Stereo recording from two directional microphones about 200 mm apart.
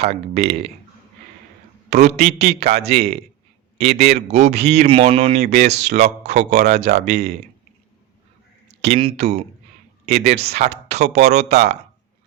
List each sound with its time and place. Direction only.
0.0 s speech: 30° right (ahead or behind)
1.9 s speech: 35° right (ahead or behind)
8.8 s speech: 25° right (ahead or behind)